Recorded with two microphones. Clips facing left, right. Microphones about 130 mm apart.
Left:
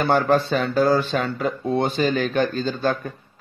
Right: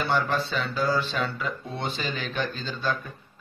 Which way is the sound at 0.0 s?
50° left (ahead or behind).